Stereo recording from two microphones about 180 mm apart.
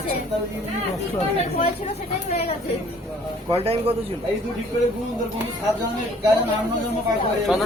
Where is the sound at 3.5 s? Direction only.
35° right (ahead or behind).